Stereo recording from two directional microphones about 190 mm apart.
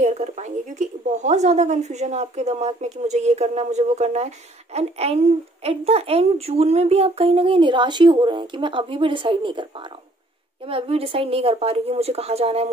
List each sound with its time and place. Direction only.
0.0 s a woman's voice: 40° right (ahead or behind)
10.7 s speech: 30° right (ahead or behind)